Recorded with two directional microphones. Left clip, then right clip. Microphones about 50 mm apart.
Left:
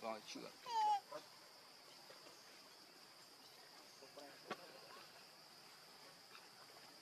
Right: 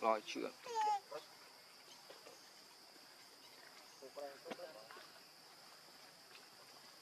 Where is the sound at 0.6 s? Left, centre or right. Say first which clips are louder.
Even; centre.